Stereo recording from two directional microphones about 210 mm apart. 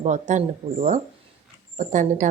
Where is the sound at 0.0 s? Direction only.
35° right (ahead or behind).